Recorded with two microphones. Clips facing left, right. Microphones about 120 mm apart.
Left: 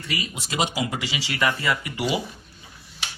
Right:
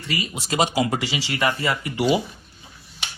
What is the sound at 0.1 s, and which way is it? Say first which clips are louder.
Speech: right 3 dB; 35° right (ahead or behind).